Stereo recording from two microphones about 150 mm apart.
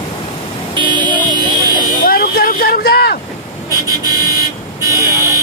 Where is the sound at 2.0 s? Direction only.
90° left.